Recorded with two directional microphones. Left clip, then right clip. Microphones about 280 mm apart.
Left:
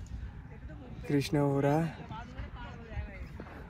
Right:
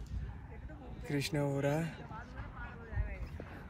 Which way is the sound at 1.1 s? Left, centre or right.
Centre.